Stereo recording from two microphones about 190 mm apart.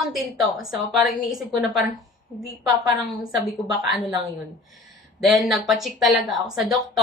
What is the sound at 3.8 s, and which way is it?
Speech, centre (ahead or behind).